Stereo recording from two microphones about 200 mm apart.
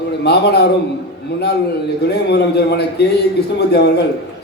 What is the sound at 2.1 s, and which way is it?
Speech, 55° left (ahead or behind).